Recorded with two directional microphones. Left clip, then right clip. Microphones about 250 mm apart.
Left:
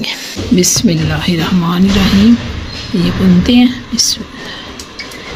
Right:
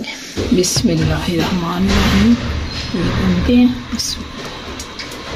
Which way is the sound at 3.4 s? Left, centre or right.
Left.